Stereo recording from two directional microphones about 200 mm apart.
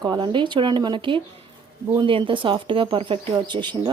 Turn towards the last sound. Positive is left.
turn(degrees=-25)  # may be behind; listen again after turning